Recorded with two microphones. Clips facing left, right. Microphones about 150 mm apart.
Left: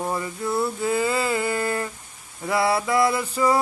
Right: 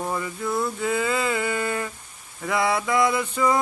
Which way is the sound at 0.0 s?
10° left (ahead or behind).